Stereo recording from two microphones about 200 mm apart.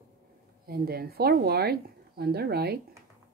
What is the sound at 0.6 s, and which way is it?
Speech, 50° right (ahead or behind).